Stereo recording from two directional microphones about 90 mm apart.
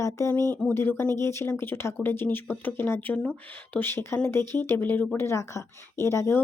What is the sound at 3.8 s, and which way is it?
A woman's voice, 30° left (ahead or behind).